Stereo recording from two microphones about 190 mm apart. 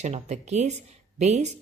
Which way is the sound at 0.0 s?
35° right (ahead or behind).